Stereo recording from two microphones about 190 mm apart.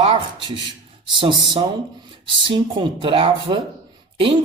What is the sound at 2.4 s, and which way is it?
Speech, 25° right (ahead or behind).